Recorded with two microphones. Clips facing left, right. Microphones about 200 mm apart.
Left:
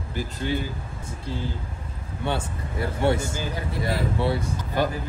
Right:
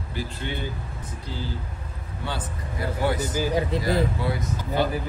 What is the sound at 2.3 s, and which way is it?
Speech, 25° left (ahead or behind).